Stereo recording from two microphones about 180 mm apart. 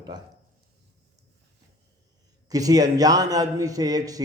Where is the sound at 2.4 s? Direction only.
20° right (ahead or behind).